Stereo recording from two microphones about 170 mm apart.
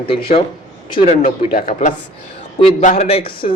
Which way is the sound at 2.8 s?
40° left (ahead or behind).